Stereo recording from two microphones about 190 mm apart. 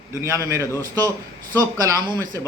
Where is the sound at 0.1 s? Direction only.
15° right (ahead or behind).